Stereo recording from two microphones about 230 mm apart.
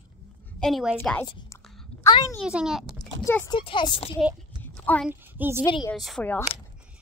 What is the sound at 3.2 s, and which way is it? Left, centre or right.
Speech, centre.